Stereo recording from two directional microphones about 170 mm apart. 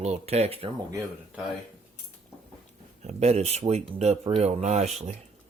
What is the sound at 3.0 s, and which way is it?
Speech, 40° right (ahead or behind).